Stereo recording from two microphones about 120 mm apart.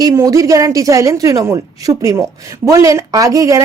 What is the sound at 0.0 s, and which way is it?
A woman's voice, 25° right (ahead or behind).